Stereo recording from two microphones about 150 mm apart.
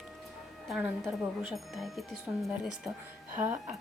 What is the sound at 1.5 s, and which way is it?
A woman's voice, centre (ahead or behind).